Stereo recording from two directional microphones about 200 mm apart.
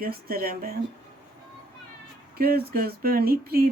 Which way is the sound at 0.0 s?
45° right (ahead or behind).